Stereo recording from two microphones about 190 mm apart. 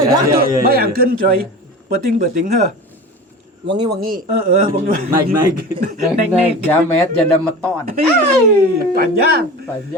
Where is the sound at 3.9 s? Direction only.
45° right (ahead or behind).